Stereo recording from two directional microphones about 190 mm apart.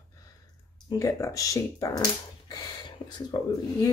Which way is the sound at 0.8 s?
15° left (ahead or behind).